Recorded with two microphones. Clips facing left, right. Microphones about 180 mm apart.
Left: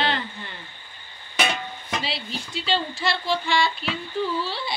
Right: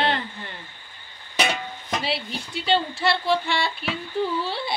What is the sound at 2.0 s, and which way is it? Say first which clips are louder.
Speech: right 3 dB; 60° right (ahead or behind).